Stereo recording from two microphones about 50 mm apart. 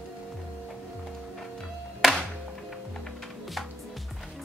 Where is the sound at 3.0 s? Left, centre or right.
Centre.